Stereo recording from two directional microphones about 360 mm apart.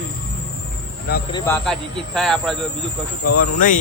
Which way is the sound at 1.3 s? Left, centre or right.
Centre.